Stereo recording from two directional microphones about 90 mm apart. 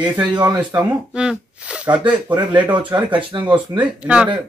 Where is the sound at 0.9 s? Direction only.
10° right (ahead or behind).